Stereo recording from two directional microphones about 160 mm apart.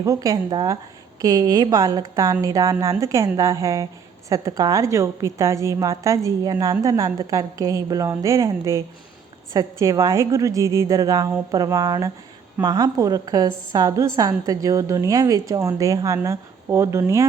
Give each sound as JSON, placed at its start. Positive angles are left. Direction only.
{"t": 0.0, "sound": "a woman's voice", "side_deg": -20}